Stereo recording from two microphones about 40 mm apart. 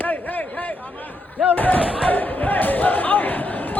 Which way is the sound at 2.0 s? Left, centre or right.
Left.